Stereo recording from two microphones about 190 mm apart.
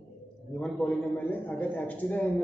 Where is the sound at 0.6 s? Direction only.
5° left (ahead or behind).